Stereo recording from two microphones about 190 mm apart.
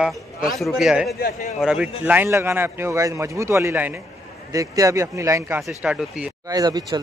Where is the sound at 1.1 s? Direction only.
50° left (ahead or behind).